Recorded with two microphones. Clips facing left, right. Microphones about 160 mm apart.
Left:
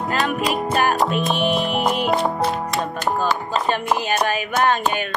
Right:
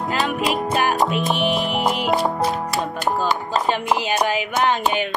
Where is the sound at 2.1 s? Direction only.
Centre (ahead or behind).